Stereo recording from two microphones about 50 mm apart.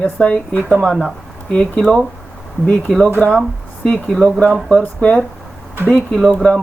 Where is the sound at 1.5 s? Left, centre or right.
Centre.